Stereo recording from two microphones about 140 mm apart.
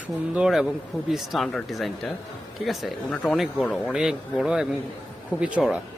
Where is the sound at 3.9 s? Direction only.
5° right (ahead or behind).